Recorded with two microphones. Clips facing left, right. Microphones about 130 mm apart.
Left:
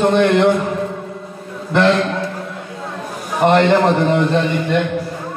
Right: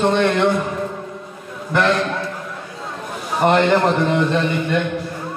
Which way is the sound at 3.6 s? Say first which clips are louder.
Left 3 dB; 25° left (ahead or behind).